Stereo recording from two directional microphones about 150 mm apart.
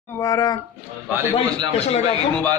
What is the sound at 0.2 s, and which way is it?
Speech, 25° left (ahead or behind).